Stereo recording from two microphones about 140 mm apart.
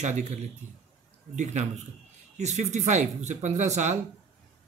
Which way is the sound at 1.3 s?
55° right (ahead or behind).